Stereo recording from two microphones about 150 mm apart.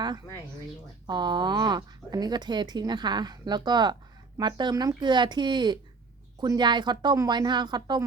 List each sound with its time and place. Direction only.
1.0 s speech: 30° right (ahead or behind)